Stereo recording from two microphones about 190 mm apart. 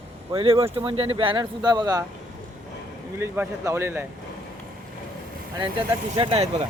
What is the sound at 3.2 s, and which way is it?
Speech, 15° right (ahead or behind).